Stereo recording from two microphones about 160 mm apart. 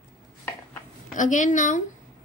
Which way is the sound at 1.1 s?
50° left (ahead or behind).